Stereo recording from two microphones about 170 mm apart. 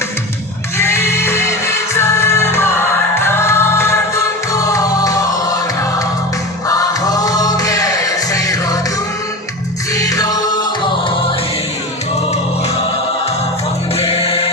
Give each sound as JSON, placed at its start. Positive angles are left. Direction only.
{"t": 0.8, "sound": "music", "side_deg": 15}
{"t": 6.7, "sound": "music", "side_deg": 20}
{"t": 9.9, "sound": "music", "side_deg": 20}
{"t": 14.0, "sound": "music", "side_deg": 35}